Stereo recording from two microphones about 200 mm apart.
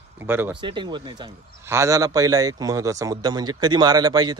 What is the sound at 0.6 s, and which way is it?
Speech, 25° right (ahead or behind).